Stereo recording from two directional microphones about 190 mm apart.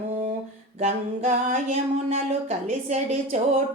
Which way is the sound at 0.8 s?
35° right (ahead or behind).